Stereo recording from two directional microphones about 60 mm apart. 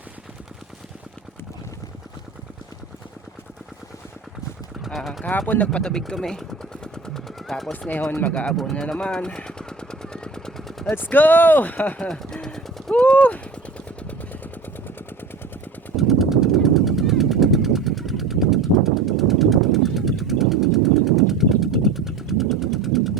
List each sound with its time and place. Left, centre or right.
4.9 s speech: centre
5.5 s speech: left; by 7.5 s centre
8.2 s speech: centre
8.7 s vehicle: centre
10.9 s speech: left
11.9 s speech: centre
12.9 s a sound: centre
16.0 s a sound: centre